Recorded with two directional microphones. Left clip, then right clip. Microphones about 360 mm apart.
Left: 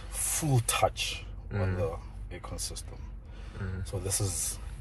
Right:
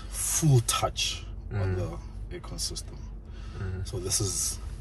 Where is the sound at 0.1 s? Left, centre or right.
Left.